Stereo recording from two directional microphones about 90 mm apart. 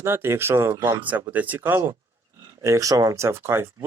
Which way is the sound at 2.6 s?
35° right (ahead or behind).